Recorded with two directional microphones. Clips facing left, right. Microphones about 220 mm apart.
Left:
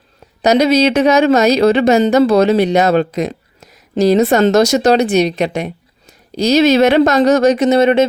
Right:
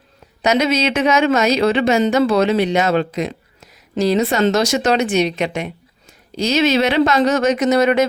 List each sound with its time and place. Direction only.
0.4 s speech: 35° left (ahead or behind)